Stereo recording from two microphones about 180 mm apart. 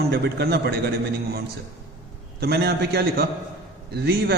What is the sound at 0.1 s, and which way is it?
Speech, 65° right (ahead or behind).